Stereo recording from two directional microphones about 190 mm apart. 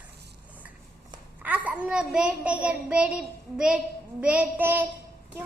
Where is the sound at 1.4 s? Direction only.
10° right (ahead or behind).